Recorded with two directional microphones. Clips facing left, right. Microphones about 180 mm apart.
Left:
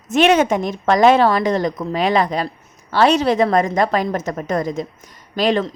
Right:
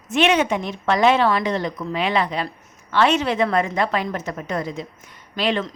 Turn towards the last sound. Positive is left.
turn(degrees=40)  # may be behind; listen again after turning